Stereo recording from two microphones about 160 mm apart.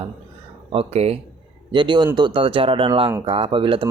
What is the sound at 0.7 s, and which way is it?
A man's voice, 40° right (ahead or behind).